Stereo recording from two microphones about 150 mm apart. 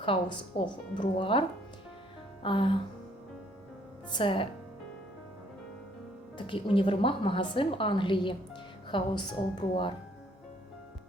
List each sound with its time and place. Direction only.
0.0 s a woman's voice: 35° left (ahead or behind)
4.1 s a woman's voice: 35° left (ahead or behind)
6.3 s a woman's voice: 35° left (ahead or behind)